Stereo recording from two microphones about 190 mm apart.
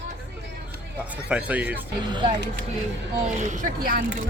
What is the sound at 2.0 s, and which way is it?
Speech, 25° right (ahead or behind).